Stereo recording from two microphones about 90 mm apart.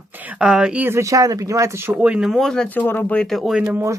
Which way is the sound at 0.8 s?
30° right (ahead or behind).